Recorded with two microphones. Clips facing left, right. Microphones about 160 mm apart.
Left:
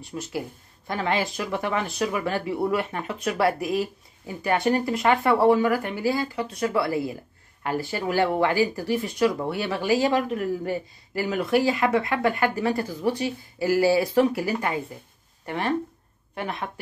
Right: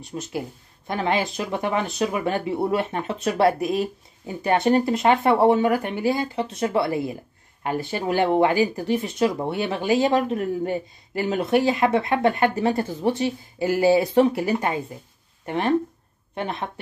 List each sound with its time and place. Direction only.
0.1 s speech: 20° right (ahead or behind)